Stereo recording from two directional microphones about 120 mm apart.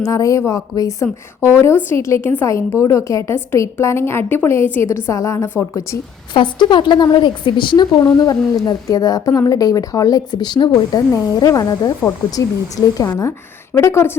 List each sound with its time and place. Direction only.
0.0 s a woman's voice: 30° left (ahead or behind)
6.3 s a woman's voice: 40° left (ahead or behind); by 14.2 s 20° left (ahead or behind)